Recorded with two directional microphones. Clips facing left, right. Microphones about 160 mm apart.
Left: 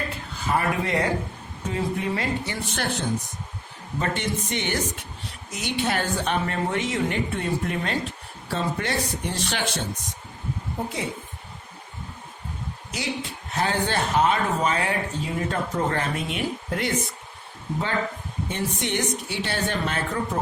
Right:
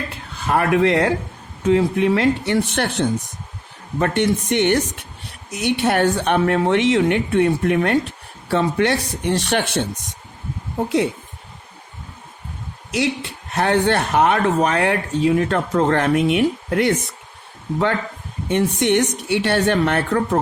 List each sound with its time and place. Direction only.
0.3 s a woman's voice: 70° right (ahead or behind)
12.9 s speech: 75° right (ahead or behind)
18.4 s speech: 70° right (ahead or behind)